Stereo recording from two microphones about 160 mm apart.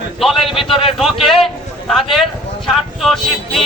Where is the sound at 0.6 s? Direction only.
35° left (ahead or behind).